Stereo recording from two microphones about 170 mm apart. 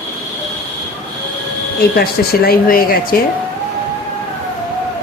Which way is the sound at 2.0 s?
65° left (ahead or behind).